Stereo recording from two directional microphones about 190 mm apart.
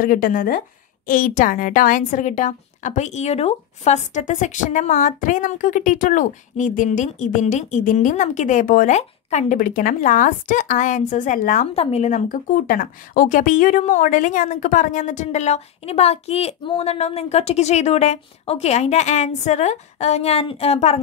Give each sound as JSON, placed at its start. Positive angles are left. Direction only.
{"t": 0.0, "sound": "a woman's voice", "side_deg": 45}
{"t": 11.6, "sound": "a woman's voice", "side_deg": 30}